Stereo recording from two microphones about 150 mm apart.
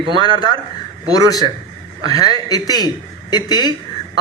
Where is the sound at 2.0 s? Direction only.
25° left (ahead or behind).